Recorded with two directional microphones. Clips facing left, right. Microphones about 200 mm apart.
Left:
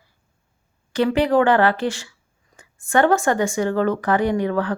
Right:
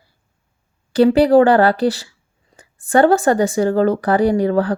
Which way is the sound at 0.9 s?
35° right (ahead or behind).